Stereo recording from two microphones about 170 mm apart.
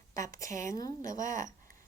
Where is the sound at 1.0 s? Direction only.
50° right (ahead or behind).